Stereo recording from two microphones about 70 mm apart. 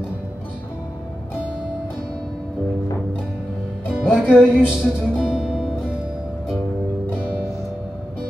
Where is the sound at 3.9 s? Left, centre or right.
Centre.